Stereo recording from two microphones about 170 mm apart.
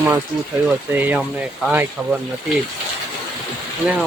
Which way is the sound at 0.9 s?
10° right (ahead or behind).